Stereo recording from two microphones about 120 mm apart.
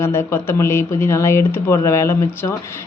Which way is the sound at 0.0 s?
20° left (ahead or behind).